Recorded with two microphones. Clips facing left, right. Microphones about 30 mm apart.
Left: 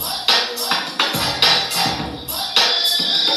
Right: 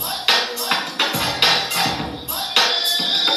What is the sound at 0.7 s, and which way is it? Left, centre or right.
Music, left.